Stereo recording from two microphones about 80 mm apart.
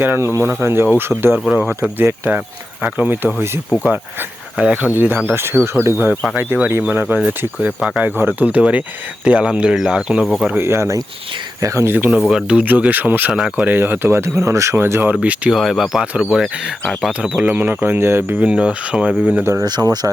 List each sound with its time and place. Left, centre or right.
0.2 s speech: right
1.5 s speech: centre
2.0 s speech: right; by 10.2 s centre
10.6 s speech: right
11.9 s speech: right
12.3 s speech: centre
12.6 s speech: centre
13.7 s speech: right
15.1 s speech: centre
15.5 s speech: centre; by 18.4 s right
18.4 s speech: centre
19.6 s speech: right